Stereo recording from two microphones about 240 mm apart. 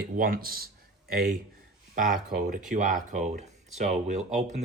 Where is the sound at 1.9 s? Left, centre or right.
Right.